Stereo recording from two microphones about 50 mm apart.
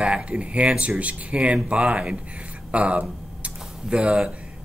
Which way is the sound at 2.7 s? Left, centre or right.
Right.